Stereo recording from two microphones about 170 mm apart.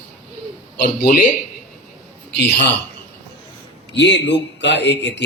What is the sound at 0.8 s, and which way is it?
Speech, 65° left (ahead or behind).